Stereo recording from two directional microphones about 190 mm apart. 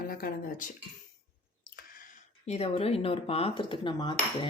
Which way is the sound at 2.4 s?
35° left (ahead or behind).